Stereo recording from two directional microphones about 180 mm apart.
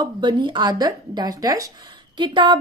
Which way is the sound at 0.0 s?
25° right (ahead or behind).